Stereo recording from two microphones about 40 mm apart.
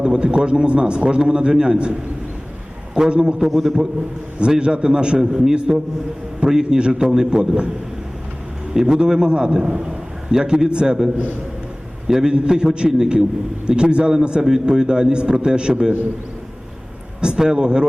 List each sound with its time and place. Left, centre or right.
0.0 s a man's voice: right
3.4 s a man's voice: centre
4.4 s a man's voice: right
8.7 s a man's voice: centre
17.2 s a man's voice: centre